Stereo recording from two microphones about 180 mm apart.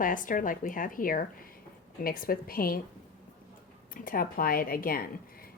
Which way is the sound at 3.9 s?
50° left (ahead or behind).